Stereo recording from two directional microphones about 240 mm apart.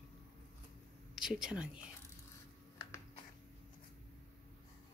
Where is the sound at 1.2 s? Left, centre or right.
Centre.